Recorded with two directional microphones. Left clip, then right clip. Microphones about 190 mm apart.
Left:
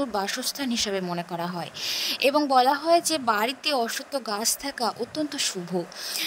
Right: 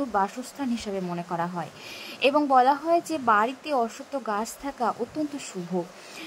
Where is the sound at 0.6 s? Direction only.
45° left (ahead or behind).